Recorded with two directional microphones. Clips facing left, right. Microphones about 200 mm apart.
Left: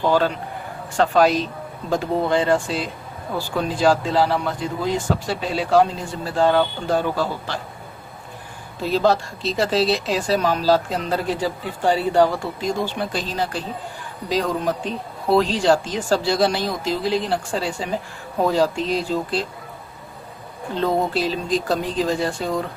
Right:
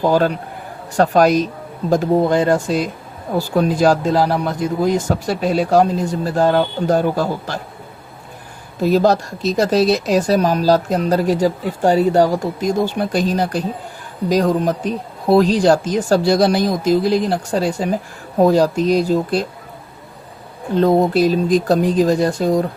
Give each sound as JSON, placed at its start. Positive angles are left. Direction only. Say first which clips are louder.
{"t": 0.1, "sound": "speech", "louder": "right 3 dB", "side_deg": -45}
{"t": 8.8, "sound": "a man's voice", "louder": "right 5 dB", "side_deg": -45}
{"t": 20.7, "sound": "speech", "louder": "right 7 dB", "side_deg": -45}